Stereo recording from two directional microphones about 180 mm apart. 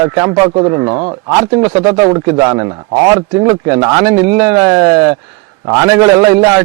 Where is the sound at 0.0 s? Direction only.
20° right (ahead or behind).